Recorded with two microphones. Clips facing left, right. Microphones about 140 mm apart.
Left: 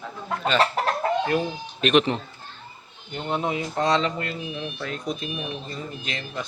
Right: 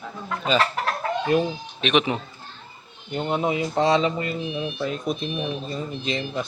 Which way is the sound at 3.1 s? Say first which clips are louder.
Right 3 dB; 20° right (ahead or behind).